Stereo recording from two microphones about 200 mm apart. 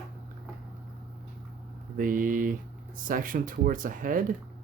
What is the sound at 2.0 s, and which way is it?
Speech, 40° right (ahead or behind).